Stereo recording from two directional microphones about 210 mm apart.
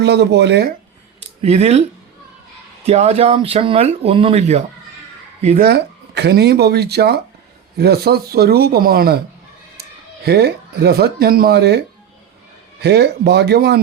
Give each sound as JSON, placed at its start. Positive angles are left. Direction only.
{"t": 0.0, "sound": "speech", "side_deg": -55}
{"t": 1.4, "sound": "speech", "side_deg": -30}
{"t": 2.8, "sound": "speech", "side_deg": -30}
{"t": 5.6, "sound": "speech", "side_deg": -50}
{"t": 10.2, "sound": "speech", "side_deg": -50}
{"t": 12.8, "sound": "speech", "side_deg": -55}